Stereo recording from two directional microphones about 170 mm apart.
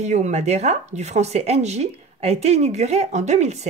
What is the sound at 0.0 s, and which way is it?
Speech, 40° right (ahead or behind).